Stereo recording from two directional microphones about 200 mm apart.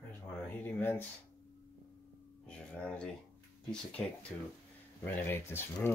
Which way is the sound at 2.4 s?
5° left (ahead or behind).